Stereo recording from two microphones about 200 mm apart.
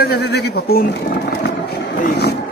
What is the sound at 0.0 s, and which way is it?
Speech, 55° left (ahead or behind).